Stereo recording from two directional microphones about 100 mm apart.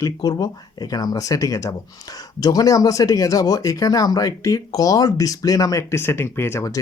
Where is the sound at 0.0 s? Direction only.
40° left (ahead or behind).